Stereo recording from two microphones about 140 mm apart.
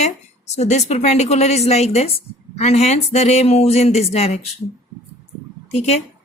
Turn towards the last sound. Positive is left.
turn(degrees=50)  # may be behind; listen again after turning